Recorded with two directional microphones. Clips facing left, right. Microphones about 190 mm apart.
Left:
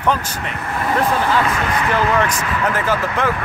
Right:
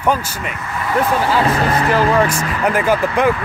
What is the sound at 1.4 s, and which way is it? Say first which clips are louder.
Speech: right 3 dB; 35° right (ahead or behind).